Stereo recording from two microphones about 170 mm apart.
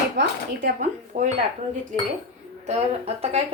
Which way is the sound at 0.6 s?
50° right (ahead or behind).